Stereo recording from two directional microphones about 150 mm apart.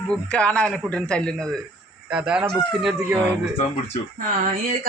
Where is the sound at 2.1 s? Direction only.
5° right (ahead or behind).